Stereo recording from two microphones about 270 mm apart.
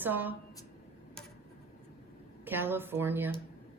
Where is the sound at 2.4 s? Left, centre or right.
Centre.